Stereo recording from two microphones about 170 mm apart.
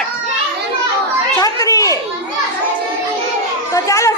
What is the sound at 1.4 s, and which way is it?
Speech, 20° left (ahead or behind).